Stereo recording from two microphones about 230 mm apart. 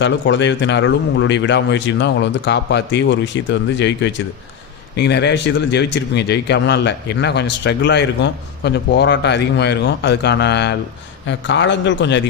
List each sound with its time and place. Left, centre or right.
0.0 s speech: left